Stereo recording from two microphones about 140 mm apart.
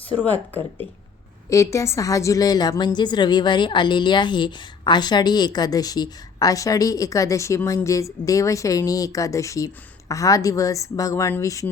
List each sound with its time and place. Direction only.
0.3 s a woman's voice: 15° left (ahead or behind)